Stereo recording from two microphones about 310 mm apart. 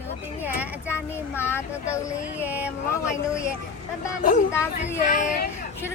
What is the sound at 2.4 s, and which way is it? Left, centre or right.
Speech, centre.